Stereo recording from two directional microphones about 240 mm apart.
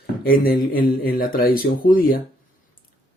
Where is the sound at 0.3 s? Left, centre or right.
Left.